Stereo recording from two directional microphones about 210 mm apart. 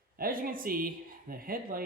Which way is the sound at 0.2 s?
45° right (ahead or behind).